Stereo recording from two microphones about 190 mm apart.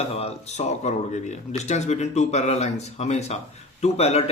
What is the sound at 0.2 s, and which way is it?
A man's voice, 35° left (ahead or behind).